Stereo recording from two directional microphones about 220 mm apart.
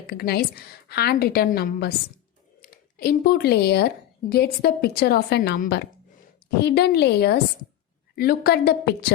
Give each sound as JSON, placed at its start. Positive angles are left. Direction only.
{"t": 0.1, "sound": "a woman's voice", "side_deg": 45}